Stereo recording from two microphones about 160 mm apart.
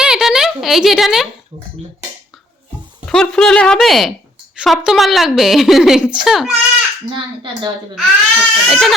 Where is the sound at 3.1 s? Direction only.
5° left (ahead or behind).